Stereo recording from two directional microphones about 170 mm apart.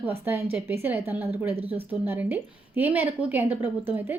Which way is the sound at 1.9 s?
10° right (ahead or behind).